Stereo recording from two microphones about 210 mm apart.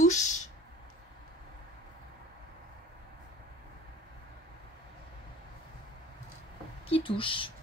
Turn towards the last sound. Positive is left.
turn(degrees=25)  # may be behind; listen again after turning